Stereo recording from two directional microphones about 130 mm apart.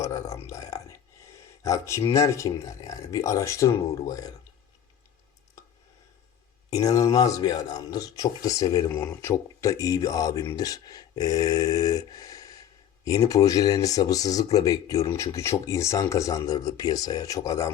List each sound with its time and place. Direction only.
0.0 s a sound: 25° left (ahead or behind)
1.6 s speech: 20° left (ahead or behind)
7.2 s speech: 30° left (ahead or behind)